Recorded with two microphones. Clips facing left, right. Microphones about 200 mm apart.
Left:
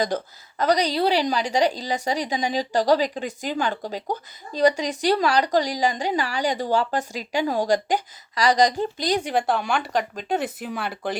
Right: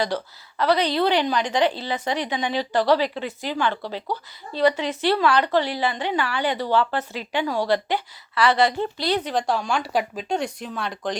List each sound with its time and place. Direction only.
0.1 s a woman's voice: 45° left (ahead or behind)
9.0 s speech: 15° left (ahead or behind); by 10.2 s 10° right (ahead or behind)
10.2 s speech: 5° left (ahead or behind)